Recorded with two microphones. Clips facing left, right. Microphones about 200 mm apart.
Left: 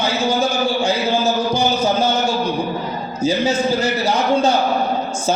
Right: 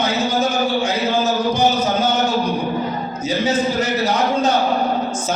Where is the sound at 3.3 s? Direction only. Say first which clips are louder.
Left 2 dB; 30° left (ahead or behind).